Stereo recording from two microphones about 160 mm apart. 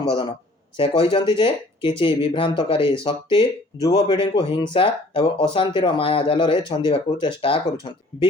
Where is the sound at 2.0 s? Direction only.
30° left (ahead or behind).